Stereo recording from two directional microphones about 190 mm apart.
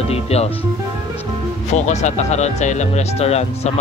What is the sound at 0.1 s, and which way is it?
Speech, 35° left (ahead or behind).